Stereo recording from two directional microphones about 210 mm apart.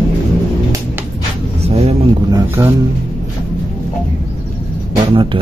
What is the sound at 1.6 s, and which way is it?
Vehicle, 30° right (ahead or behind).